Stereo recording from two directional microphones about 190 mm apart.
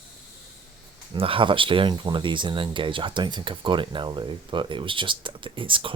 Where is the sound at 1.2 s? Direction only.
30° right (ahead or behind).